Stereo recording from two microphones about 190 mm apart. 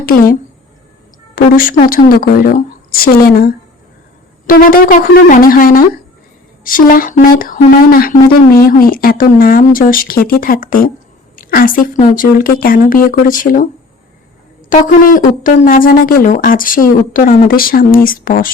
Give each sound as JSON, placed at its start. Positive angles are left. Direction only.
{"t": 0.0, "sound": "speech", "side_deg": 50}
{"t": 1.4, "sound": "a woman's voice", "side_deg": 50}
{"t": 14.7, "sound": "speech", "side_deg": 45}